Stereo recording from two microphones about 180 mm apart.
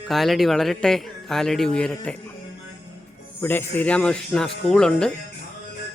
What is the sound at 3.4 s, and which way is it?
A man's voice, 10° left (ahead or behind).